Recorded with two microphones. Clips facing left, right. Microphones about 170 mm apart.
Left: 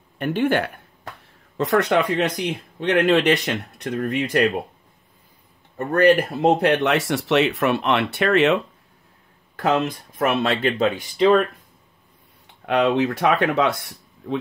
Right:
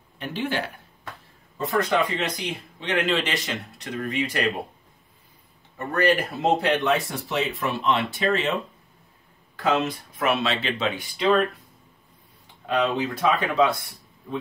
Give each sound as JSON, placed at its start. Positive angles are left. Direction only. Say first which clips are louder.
{"t": 0.2, "sound": "speech", "louder": "left 8 dB", "side_deg": 55}
{"t": 1.6, "sound": "speech", "louder": "left 4 dB", "side_deg": 80}
{"t": 5.8, "sound": "speech", "louder": "left 6 dB", "side_deg": 55}
{"t": 6.6, "sound": "speech", "louder": "left 4 dB", "side_deg": 65}
{"t": 9.6, "sound": "speech", "louder": "left 3 dB", "side_deg": 50}
{"t": 12.6, "sound": "speech", "louder": "left 5 dB", "side_deg": 70}